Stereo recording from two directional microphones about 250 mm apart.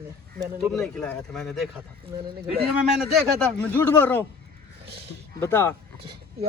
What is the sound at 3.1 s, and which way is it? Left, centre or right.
Speech, centre.